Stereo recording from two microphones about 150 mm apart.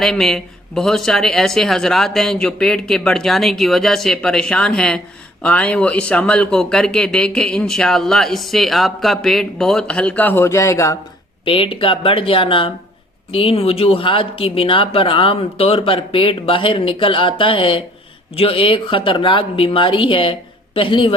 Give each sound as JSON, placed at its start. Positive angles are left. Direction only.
{"t": 0.0, "sound": "speech", "side_deg": 0}
{"t": 11.4, "sound": "speech", "side_deg": 35}